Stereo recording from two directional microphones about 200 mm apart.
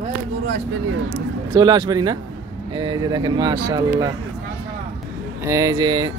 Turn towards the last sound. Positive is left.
turn(degrees=-20)  # may be behind; listen again after turning